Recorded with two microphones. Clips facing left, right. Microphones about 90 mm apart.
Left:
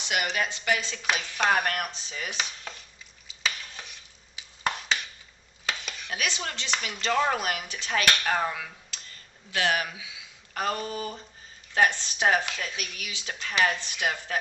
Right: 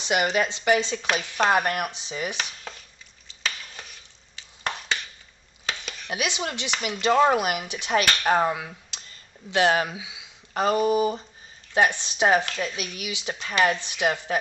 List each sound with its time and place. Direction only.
0.0 s speech: 30° right (ahead or behind)
1.5 s speech: 15° right (ahead or behind)
3.3 s a sound: centre (ahead or behind)
6.1 s speech: 15° right (ahead or behind)
8.2 s speech: 30° right (ahead or behind)